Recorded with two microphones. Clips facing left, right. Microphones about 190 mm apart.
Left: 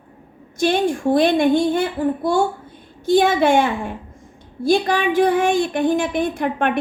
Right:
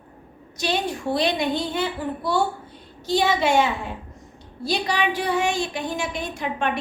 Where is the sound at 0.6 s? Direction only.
50° left (ahead or behind).